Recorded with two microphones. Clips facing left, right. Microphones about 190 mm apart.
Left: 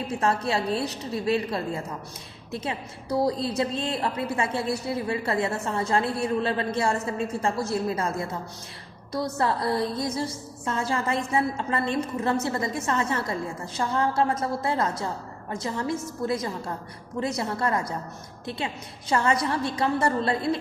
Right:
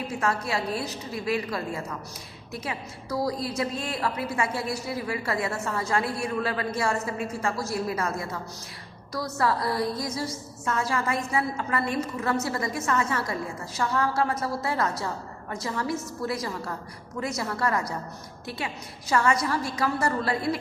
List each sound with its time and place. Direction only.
0.2 s a woman's voice: 30° left (ahead or behind)